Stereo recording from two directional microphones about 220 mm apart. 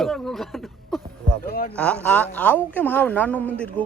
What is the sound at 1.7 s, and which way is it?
Speech, 5° left (ahead or behind).